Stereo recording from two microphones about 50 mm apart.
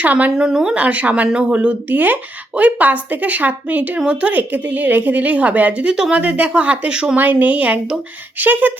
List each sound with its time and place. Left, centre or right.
0.0 s a woman's voice: right
0.3 s speech: centre
0.8 s a woman's voice: right
1.9 s a woman's voice: right; by 7.2 s centre
7.2 s a woman's voice: right